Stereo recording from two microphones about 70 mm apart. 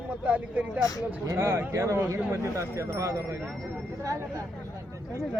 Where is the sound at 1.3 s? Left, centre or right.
Right.